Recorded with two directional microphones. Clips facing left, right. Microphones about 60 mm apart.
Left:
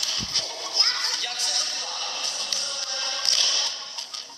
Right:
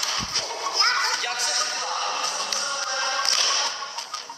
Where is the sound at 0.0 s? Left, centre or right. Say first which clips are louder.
Right 4 dB; right.